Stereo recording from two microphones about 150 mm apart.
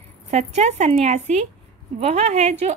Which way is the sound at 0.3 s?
50° right (ahead or behind).